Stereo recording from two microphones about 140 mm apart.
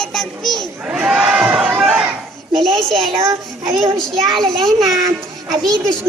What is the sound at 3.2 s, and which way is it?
Child singing, 25° right (ahead or behind).